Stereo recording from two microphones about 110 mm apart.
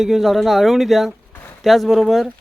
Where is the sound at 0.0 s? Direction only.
Centre (ahead or behind).